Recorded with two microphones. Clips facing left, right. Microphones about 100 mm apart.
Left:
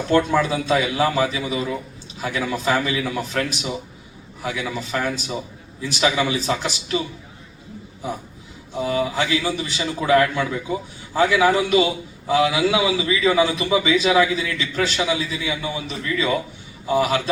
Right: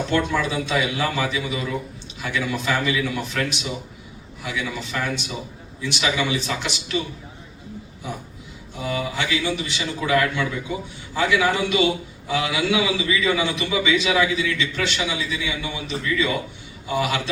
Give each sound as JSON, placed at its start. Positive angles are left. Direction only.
{"t": 0.1, "sound": "a man's voice", "side_deg": 40}
{"t": 8.8, "sound": "a man's voice", "side_deg": 35}